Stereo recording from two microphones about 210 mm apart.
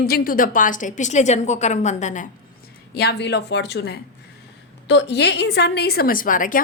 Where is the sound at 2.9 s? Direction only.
50° left (ahead or behind).